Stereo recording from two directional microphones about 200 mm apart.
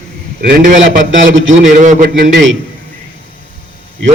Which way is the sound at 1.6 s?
40° right (ahead or behind).